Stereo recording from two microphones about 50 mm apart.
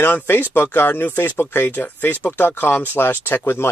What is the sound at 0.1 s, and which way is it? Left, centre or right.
Speech, left.